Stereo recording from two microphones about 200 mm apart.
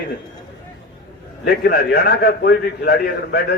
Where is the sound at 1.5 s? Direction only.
50° left (ahead or behind).